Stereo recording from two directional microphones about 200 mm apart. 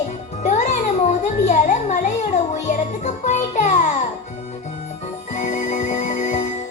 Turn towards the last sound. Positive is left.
turn(degrees=35)  # may be behind; listen again after turning